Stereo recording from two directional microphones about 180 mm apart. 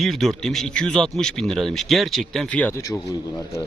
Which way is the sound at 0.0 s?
Centre (ahead or behind).